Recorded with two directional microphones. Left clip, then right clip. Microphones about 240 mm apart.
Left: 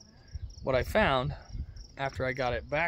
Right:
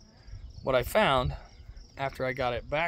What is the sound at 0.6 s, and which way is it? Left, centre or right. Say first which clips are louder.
Speech: right 2 dB; centre.